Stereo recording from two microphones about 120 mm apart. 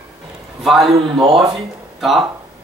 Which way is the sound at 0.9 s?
50° right (ahead or behind).